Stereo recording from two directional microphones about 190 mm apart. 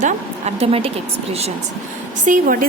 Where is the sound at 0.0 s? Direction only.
35° right (ahead or behind).